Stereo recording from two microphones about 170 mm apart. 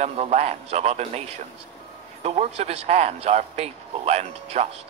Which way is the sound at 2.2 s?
40° right (ahead or behind).